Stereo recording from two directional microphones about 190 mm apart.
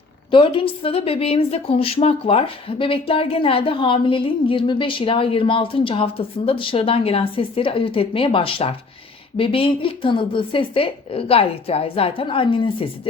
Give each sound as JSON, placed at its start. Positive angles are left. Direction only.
{"t": 0.3, "sound": "a woman's voice", "side_deg": 25}